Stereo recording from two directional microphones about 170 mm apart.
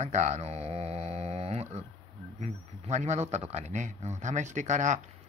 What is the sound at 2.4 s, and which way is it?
Speech, 45° right (ahead or behind).